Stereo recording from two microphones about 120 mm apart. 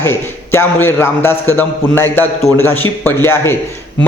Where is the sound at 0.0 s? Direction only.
20° left (ahead or behind).